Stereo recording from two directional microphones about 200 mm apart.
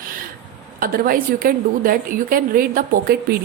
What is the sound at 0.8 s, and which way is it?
A woman's voice, 45° right (ahead or behind).